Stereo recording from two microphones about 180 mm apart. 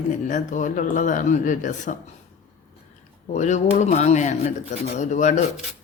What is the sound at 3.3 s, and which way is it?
Speech, 40° left (ahead or behind).